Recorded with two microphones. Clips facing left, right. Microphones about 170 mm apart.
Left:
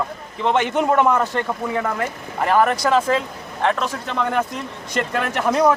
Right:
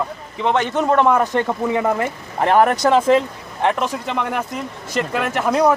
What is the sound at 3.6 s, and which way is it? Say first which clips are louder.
A man's voice: right 2 dB; 15° right (ahead or behind).